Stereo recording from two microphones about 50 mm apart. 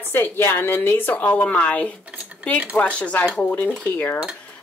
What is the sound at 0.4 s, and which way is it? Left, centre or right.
Speech, left.